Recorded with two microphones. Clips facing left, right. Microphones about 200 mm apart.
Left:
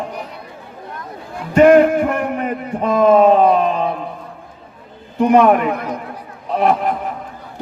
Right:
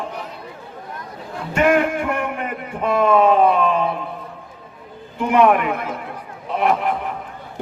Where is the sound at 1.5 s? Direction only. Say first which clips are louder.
Left 8 dB; 40° left (ahead or behind).